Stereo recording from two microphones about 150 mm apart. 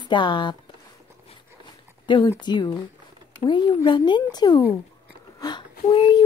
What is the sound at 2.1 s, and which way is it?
A child's voice, 30° left (ahead or behind).